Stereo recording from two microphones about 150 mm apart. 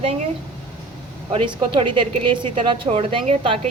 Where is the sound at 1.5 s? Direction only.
35° right (ahead or behind).